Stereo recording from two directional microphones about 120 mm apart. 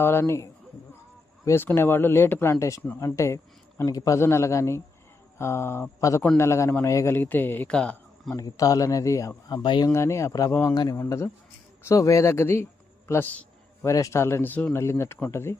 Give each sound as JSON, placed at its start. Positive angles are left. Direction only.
{"t": 0.0, "sound": "a man's voice", "side_deg": 20}
{"t": 8.4, "sound": "a man's voice", "side_deg": 30}
{"t": 9.5, "sound": "speech", "side_deg": 35}
{"t": 9.9, "sound": "a man's voice", "side_deg": 25}